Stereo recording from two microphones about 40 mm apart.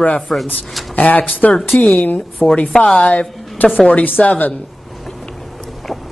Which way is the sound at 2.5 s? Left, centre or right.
Left.